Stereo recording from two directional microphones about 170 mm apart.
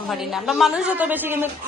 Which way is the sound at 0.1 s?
Centre (ahead or behind).